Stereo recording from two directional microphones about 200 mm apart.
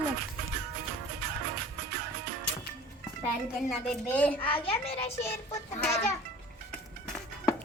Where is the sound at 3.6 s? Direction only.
5° left (ahead or behind).